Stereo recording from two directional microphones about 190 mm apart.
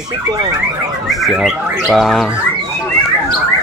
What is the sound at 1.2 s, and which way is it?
Speech, centre (ahead or behind).